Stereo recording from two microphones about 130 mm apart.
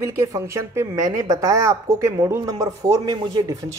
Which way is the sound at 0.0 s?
20° right (ahead or behind).